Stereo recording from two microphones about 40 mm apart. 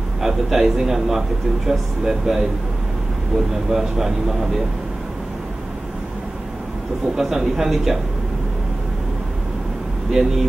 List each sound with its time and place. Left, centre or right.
0.2 s a man's voice: centre
3.7 s a man's voice: centre
7.2 s a man's voice: centre
10.2 s a man's voice: centre